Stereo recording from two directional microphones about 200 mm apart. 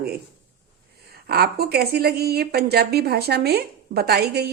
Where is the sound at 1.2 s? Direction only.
50° right (ahead or behind).